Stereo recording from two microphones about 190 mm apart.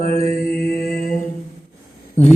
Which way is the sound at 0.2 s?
50° left (ahead or behind).